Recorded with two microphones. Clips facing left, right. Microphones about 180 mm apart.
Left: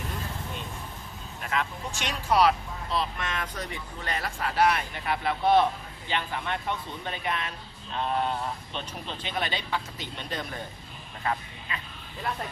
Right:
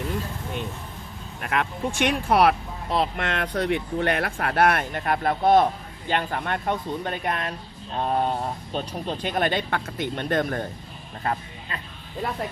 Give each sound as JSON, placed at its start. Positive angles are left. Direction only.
{"t": 1.4, "sound": "speech", "side_deg": -60}
{"t": 11.2, "sound": "speech", "side_deg": -40}